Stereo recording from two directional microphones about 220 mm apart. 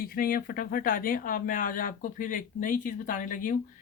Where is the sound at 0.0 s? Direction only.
40° left (ahead or behind).